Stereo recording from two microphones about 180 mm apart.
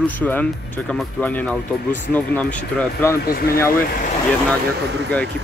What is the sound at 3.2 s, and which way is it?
Speech, 55° left (ahead or behind).